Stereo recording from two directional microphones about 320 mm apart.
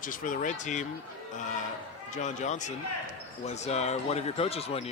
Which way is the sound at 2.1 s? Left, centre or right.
Left.